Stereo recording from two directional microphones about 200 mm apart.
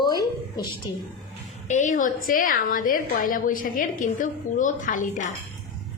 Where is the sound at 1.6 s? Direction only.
40° left (ahead or behind).